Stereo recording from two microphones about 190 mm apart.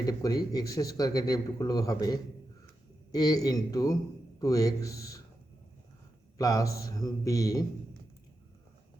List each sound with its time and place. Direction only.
0.0 s a man's voice: 20° left (ahead or behind)
6.3 s a man's voice: 15° left (ahead or behind)